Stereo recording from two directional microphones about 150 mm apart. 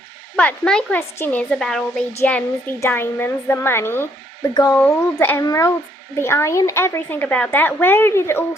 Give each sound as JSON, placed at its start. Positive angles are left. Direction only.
{"t": 0.3, "sound": "a woman's voice", "side_deg": 5}
{"t": 4.8, "sound": "a woman's voice", "side_deg": 15}